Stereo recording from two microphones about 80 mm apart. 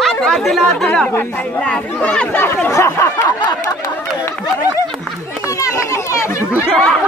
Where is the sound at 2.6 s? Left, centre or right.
Left.